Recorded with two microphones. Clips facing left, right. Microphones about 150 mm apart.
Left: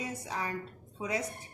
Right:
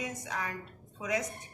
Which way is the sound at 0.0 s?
30° left (ahead or behind).